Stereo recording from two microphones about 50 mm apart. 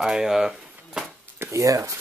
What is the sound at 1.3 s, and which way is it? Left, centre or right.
Speech, right.